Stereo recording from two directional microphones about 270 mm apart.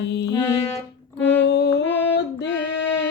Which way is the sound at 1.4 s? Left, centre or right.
Left.